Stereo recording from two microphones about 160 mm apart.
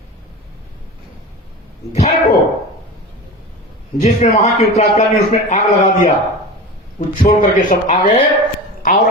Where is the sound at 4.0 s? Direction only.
45° left (ahead or behind).